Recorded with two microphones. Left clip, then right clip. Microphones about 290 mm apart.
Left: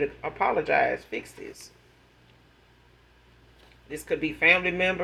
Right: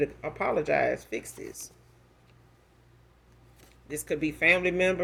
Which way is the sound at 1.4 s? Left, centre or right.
Right.